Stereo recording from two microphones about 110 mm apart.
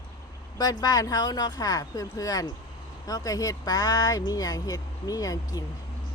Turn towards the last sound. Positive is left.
turn(degrees=35)  # may be behind; listen again after turning